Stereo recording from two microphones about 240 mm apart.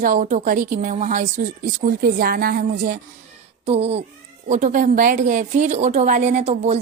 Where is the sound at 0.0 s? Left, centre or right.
Right.